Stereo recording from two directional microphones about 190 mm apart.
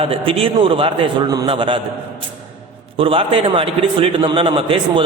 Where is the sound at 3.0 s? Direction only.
30° right (ahead or behind).